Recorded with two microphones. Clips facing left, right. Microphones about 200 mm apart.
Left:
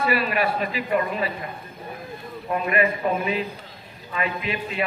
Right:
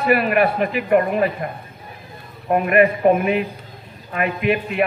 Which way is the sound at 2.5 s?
55° right (ahead or behind).